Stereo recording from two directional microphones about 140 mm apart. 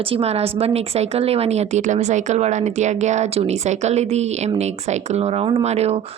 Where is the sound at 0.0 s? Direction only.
45° right (ahead or behind).